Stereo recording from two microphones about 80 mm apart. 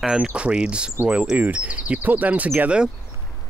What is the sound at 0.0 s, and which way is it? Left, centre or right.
Speech, centre.